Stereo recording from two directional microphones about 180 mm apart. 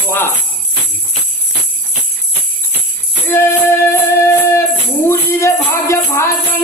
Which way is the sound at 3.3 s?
15° left (ahead or behind).